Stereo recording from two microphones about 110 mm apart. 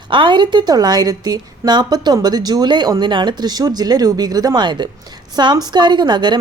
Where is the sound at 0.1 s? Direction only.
50° right (ahead or behind).